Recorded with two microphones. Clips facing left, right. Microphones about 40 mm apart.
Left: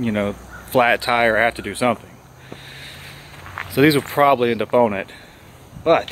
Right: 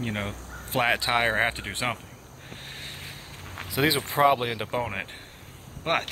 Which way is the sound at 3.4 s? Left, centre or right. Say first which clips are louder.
Left 10 dB; left.